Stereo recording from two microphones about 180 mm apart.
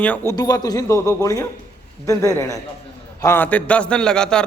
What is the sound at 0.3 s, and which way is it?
A man's voice, 20° left (ahead or behind).